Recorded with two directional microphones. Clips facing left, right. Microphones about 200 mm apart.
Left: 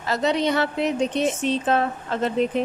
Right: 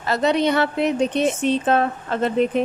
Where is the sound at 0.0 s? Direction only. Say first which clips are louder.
Right 3 dB; 60° right (ahead or behind).